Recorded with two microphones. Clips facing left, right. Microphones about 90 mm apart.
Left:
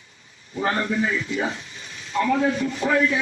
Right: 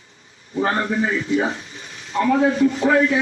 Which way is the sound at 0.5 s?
30° right (ahead or behind).